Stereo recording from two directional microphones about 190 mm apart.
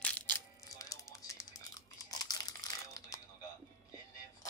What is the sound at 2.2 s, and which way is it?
Crumpling, 20° left (ahead or behind).